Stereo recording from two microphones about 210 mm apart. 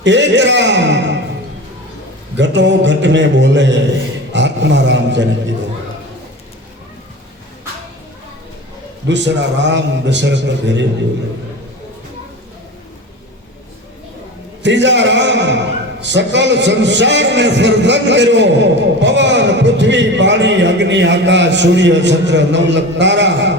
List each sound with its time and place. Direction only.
0.0 s a man's voice: 60° right (ahead or behind)
2.4 s a man's voice: 55° right (ahead or behind)
4.3 s a sound: 55° right (ahead or behind)
9.0 s a man's voice: 55° right (ahead or behind)
14.6 s a man's voice: 60° right (ahead or behind)